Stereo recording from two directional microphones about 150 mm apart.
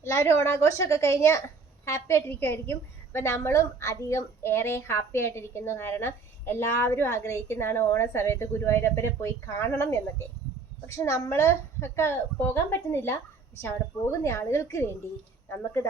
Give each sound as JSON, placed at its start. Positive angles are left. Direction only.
{"t": 0.0, "sound": "a woman's voice", "side_deg": 20}